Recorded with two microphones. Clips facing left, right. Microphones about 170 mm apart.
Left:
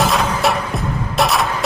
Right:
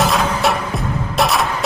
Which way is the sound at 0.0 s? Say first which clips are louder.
Even; centre (ahead or behind).